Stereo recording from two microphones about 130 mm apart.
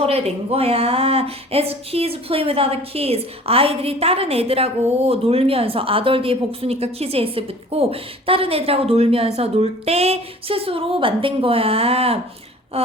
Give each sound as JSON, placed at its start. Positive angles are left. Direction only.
{"t": 0.0, "sound": "a woman's voice", "side_deg": -50}